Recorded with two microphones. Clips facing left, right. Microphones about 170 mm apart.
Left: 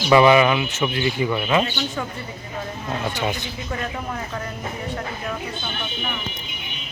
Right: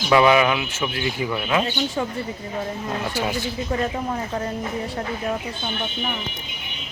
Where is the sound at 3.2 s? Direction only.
5° right (ahead or behind).